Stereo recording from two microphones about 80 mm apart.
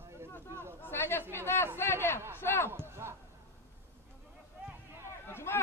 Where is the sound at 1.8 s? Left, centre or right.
Left.